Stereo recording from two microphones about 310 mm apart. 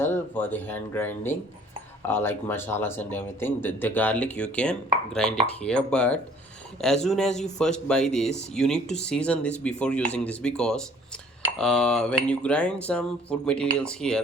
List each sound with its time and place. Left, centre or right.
0.0 s speech: centre